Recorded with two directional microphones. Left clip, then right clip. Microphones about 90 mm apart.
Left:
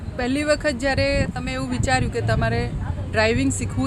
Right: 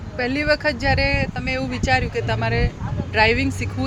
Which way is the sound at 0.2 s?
45° left (ahead or behind).